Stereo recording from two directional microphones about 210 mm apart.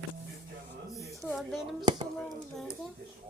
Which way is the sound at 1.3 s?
Centre (ahead or behind).